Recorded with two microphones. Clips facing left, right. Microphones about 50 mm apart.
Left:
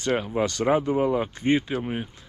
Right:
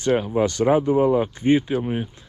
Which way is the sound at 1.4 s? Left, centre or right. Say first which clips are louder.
Right 4 dB; left.